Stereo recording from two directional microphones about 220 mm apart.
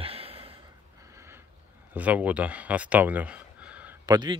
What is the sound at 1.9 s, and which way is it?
Speech, 5° right (ahead or behind).